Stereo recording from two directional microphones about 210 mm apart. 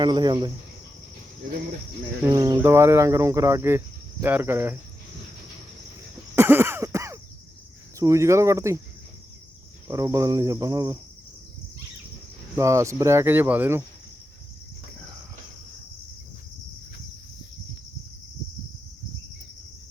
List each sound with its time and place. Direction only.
0.0 s cricket: 20° right (ahead or behind)
2.2 s speech: 20° right (ahead or behind)
6.3 s cough: 10° right (ahead or behind)
7.9 s speech: 15° right (ahead or behind)
9.9 s speech: 15° right (ahead or behind)
12.5 s speech: 15° right (ahead or behind)